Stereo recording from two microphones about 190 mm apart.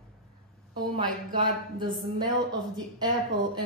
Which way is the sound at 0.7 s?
25° right (ahead or behind).